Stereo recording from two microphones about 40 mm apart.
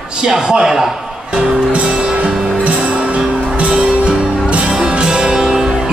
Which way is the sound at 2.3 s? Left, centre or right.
Centre.